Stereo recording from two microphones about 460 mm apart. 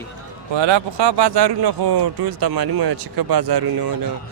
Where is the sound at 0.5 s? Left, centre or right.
Right.